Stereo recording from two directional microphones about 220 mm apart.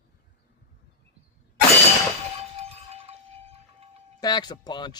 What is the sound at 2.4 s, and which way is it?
Breaking, 30° right (ahead or behind).